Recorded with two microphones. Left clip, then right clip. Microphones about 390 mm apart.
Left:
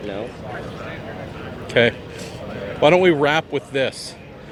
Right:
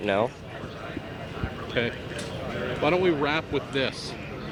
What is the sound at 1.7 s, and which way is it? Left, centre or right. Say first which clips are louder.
A man's voice: left 12 dB; left.